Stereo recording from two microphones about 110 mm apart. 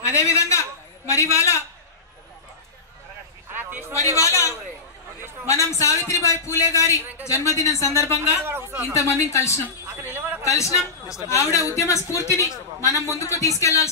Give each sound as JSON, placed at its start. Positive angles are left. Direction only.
{"t": 0.0, "sound": "a man's voice", "side_deg": 25}
{"t": 3.5, "sound": "a sound", "side_deg": -20}
{"t": 3.9, "sound": "a man's voice", "side_deg": 30}
{"t": 8.5, "sound": "a man's voice", "side_deg": -20}
{"t": 8.9, "sound": "a man's voice", "side_deg": 30}
{"t": 9.8, "sound": "a sound", "side_deg": -20}
{"t": 10.4, "sound": "a man's voice", "side_deg": 30}
{"t": 12.9, "sound": "a man's voice", "side_deg": -30}
{"t": 13.2, "sound": "a man's voice", "side_deg": 30}